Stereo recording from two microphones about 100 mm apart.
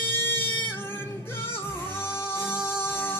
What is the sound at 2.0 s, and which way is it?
Music, 25° left (ahead or behind).